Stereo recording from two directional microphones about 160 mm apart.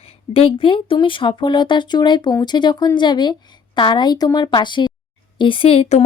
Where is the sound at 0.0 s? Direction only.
35° left (ahead or behind).